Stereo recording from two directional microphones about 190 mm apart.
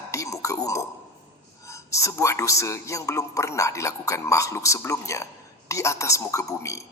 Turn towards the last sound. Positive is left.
turn(degrees=15)  # may be behind; listen again after turning